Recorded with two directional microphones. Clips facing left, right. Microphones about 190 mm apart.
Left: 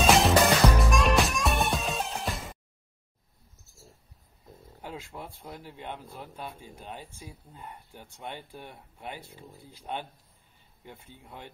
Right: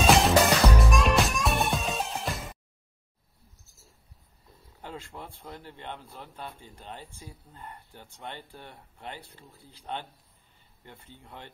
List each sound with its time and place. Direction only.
0.0 s music: centre (ahead or behind)
4.8 s speech: 10° left (ahead or behind)